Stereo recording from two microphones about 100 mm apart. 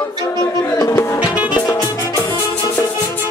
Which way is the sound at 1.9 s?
30° left (ahead or behind).